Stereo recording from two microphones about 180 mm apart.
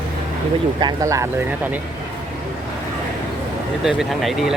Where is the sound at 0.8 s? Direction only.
20° right (ahead or behind).